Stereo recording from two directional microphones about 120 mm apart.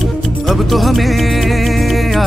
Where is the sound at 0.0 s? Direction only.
Centre (ahead or behind).